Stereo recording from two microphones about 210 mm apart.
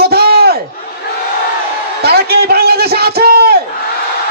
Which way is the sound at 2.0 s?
50° right (ahead or behind).